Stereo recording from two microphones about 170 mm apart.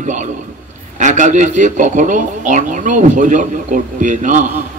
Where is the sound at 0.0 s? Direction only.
45° right (ahead or behind).